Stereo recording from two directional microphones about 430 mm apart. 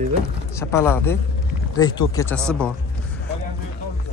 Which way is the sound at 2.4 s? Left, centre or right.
Centre.